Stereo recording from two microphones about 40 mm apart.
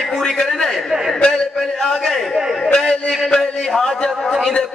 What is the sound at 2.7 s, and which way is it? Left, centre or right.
A man's voice, centre.